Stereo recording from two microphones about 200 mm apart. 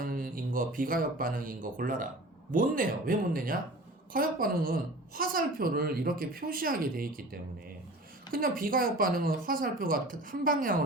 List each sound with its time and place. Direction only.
0.0 s a woman's voice: 45° right (ahead or behind)